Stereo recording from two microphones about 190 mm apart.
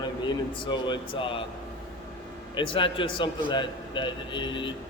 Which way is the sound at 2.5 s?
25° left (ahead or behind).